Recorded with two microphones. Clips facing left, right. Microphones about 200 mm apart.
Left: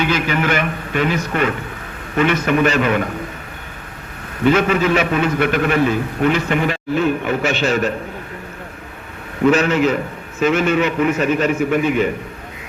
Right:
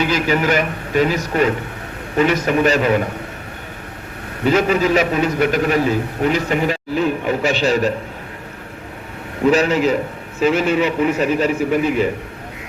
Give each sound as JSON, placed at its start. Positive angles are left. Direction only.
{"t": 0.0, "sound": "a man's voice", "side_deg": -40}
{"t": 4.4, "sound": "a man's voice", "side_deg": -35}
{"t": 9.5, "sound": "a man's voice", "side_deg": -35}